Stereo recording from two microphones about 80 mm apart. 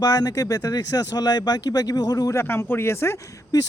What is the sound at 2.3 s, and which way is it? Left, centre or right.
Speech, left.